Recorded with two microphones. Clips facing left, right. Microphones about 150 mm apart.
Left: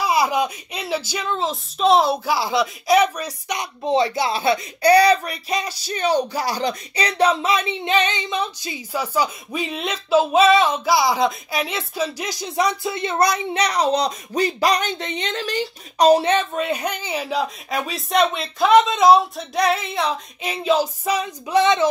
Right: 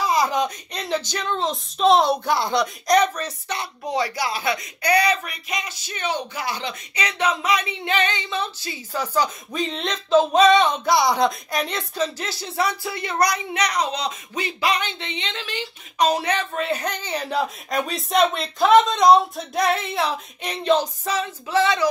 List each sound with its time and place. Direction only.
0.0 s speech: 10° left (ahead or behind)
3.8 s speech: 25° left (ahead or behind)